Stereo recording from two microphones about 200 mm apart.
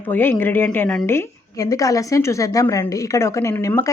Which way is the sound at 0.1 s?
10° left (ahead or behind).